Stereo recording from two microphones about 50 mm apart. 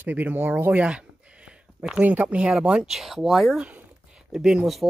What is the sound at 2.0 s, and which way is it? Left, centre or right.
Speech, right.